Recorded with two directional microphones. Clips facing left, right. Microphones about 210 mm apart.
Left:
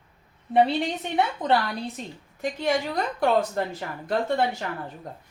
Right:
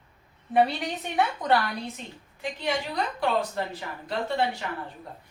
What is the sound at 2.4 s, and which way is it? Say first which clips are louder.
A woman's voice: left 4 dB; 45° left (ahead or behind).